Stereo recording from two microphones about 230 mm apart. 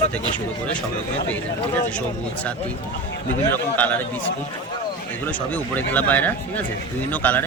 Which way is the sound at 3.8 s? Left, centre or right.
Centre.